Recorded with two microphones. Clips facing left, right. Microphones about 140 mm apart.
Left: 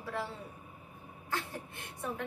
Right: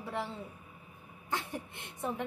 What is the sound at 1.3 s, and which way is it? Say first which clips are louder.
Speech: right 1 dB; 20° right (ahead or behind).